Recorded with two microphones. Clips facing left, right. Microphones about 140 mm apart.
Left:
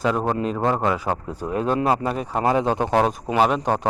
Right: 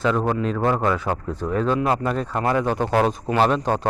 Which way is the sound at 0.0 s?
10° left (ahead or behind).